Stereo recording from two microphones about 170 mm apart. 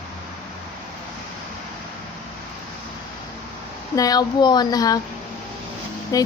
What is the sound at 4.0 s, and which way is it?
Speech, 25° left (ahead or behind).